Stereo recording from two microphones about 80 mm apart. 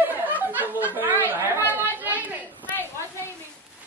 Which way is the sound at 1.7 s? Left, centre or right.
Right.